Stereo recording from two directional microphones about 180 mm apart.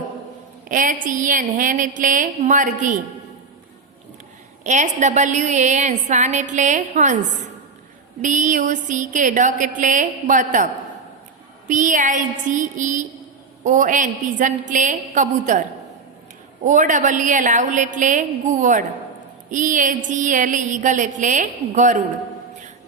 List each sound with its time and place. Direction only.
0.7 s a woman's voice: 45° right (ahead or behind)
4.6 s a woman's voice: 40° right (ahead or behind)
11.7 s a woman's voice: 45° right (ahead or behind)
16.6 s a woman's voice: 45° right (ahead or behind)